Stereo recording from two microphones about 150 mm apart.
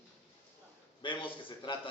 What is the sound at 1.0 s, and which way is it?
Speech, 35° left (ahead or behind).